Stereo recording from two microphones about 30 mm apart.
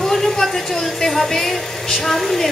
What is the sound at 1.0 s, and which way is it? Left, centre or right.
A woman's voice, centre.